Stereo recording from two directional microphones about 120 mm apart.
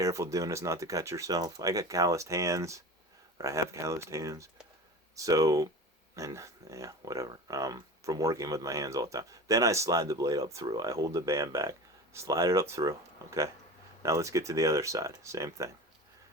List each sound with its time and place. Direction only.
0.0 s speech: 25° right (ahead or behind)